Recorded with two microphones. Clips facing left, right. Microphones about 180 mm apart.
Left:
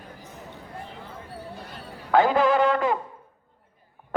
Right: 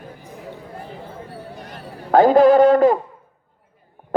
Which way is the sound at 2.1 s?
40° right (ahead or behind).